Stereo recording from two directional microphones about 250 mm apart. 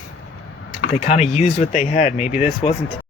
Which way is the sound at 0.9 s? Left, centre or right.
Left.